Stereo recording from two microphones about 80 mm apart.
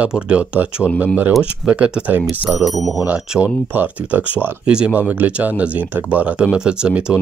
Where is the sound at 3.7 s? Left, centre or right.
Right.